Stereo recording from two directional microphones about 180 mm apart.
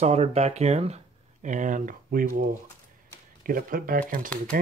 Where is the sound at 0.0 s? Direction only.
35° right (ahead or behind).